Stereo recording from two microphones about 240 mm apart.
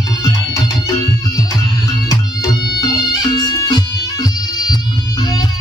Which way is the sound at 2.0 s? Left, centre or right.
Centre.